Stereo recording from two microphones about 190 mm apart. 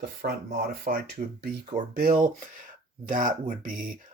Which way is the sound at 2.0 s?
45° right (ahead or behind).